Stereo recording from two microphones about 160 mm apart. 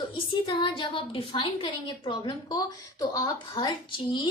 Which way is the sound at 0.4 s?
35° left (ahead or behind).